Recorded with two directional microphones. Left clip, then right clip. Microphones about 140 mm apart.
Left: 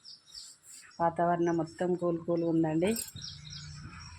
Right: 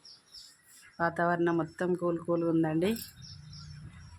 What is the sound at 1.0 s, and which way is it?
Speech, 15° right (ahead or behind).